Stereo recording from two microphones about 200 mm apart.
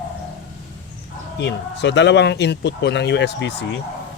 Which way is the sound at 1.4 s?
60° left (ahead or behind).